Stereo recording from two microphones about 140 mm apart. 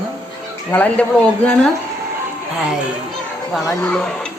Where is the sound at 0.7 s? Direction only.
10° left (ahead or behind).